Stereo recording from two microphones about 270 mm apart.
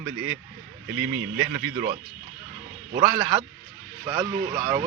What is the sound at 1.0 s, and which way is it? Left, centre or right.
Speech, right.